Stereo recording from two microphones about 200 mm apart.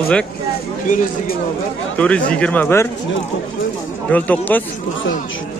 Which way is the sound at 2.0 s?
5° left (ahead or behind).